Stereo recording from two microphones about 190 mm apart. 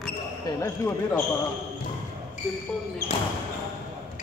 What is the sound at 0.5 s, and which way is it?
Speech, 15° left (ahead or behind).